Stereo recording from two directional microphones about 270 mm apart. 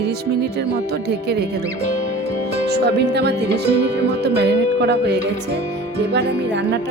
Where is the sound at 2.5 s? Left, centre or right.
Right.